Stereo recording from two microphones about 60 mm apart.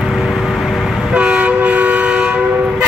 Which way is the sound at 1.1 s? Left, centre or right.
Centre.